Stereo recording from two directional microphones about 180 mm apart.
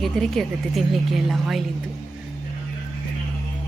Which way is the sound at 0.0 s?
Centre (ahead or behind).